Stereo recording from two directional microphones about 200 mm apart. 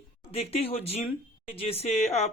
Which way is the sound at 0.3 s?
30° left (ahead or behind).